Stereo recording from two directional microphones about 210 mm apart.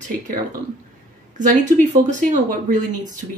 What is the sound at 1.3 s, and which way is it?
Speech, 35° right (ahead or behind).